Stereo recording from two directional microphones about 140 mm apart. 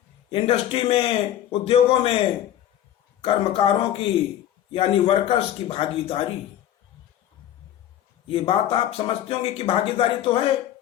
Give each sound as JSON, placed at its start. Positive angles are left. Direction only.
{"t": 0.3, "sound": "speech", "side_deg": 40}
{"t": 3.2, "sound": "speech", "side_deg": 40}
{"t": 8.3, "sound": "speech", "side_deg": 40}